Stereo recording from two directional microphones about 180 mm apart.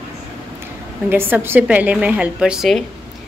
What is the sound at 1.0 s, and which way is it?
A woman's voice, 10° right (ahead or behind).